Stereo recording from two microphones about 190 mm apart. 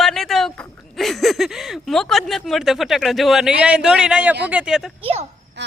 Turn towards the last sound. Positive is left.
turn(degrees=-30)  # may be behind; listen again after turning